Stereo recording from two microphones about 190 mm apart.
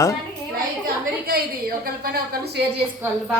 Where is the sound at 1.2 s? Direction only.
50° right (ahead or behind).